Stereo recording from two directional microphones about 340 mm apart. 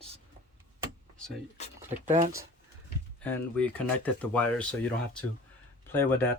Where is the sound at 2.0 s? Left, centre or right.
Right.